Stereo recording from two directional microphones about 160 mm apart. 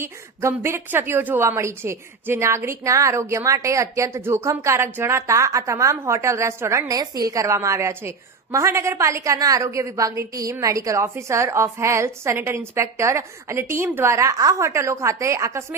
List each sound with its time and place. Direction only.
0.0 s a woman's voice: 15° right (ahead or behind)